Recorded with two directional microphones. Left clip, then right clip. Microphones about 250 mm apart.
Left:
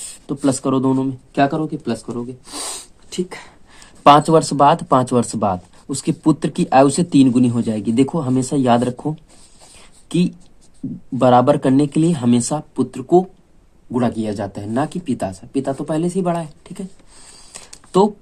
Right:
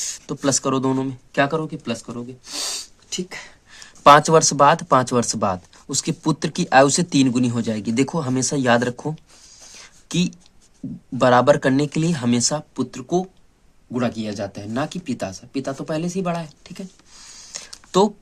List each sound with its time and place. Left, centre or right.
0.3 s speech: right
2.5 s sneeze: centre
4.0 s speech: right
9.8 s a sound: right
11.2 s speech: right